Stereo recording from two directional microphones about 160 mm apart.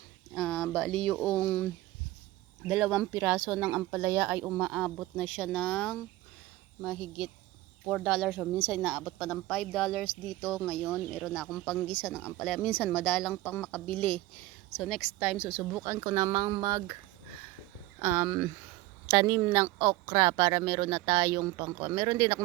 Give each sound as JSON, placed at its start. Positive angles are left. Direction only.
{"t": 0.3, "sound": "a sound", "side_deg": 10}
{"t": 1.0, "sound": "speech", "side_deg": 10}
{"t": 2.6, "sound": "a woman's voice", "side_deg": -5}
{"t": 15.8, "sound": "speech", "side_deg": -20}
{"t": 18.0, "sound": "speech", "side_deg": -15}